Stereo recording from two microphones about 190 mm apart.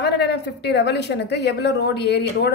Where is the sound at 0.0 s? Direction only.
60° left (ahead or behind).